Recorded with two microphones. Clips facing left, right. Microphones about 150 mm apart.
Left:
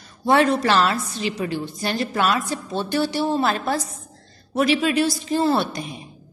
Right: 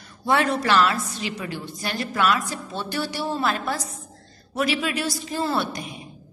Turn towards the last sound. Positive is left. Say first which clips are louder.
# left 5 dB
turn(degrees=30)  # may be behind; listen again after turning